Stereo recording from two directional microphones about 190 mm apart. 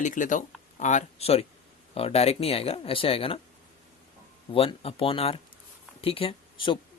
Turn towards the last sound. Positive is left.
turn(degrees=25)  # may be behind; listen again after turning